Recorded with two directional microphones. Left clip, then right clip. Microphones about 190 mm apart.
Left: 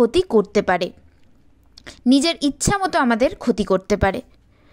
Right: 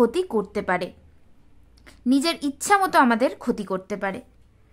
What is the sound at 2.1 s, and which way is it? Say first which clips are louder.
A woman's voice: left 5 dB; 25° left (ahead or behind).